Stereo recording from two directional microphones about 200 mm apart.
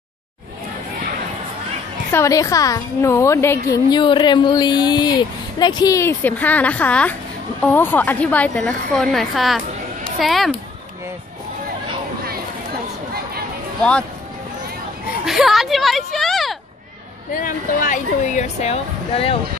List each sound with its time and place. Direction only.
2.1 s a woman's voice: 15° left (ahead or behind); by 10.5 s centre (ahead or behind)
15.2 s speech: centre (ahead or behind)
17.3 s speech: 40° left (ahead or behind)